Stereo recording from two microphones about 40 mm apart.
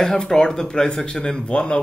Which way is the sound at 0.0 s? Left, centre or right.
Centre.